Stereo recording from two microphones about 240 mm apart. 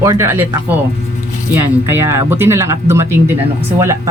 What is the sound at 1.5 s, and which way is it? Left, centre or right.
A woman's voice, centre.